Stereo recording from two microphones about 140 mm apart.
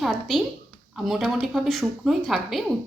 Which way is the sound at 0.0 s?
Centre (ahead or behind).